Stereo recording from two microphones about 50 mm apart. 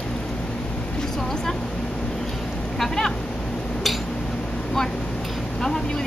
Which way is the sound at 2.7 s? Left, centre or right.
Centre.